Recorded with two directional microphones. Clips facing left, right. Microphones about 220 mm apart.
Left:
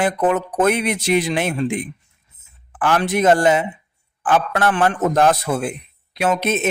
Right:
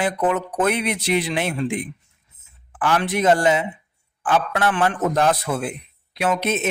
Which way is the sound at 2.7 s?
50° left (ahead or behind).